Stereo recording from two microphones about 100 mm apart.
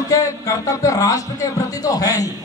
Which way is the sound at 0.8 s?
35° left (ahead or behind).